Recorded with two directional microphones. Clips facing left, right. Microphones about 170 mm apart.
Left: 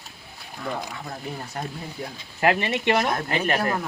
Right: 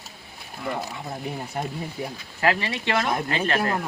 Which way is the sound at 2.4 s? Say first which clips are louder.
Left 2 dB; 20° left (ahead or behind).